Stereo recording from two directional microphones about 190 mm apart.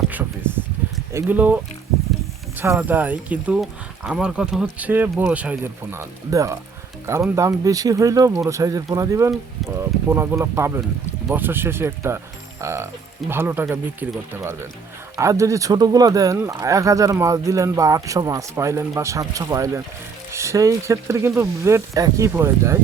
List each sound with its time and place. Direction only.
1.1 s speech: 10° right (ahead or behind)
2.6 s speech: 10° right (ahead or behind)